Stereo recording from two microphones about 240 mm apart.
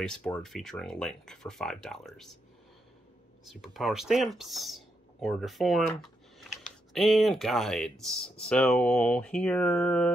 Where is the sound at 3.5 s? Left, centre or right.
Centre.